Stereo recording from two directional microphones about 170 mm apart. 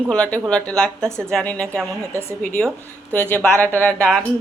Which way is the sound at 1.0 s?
15° right (ahead or behind).